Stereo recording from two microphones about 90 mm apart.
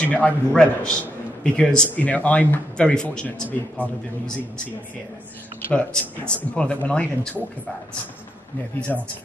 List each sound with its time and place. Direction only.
0.0 s speech: 15° left (ahead or behind)
5.7 s speech: 15° left (ahead or behind)
8.9 s speech: 15° left (ahead or behind)